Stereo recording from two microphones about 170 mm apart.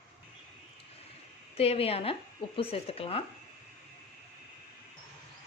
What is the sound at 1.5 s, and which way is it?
Speech, 35° left (ahead or behind).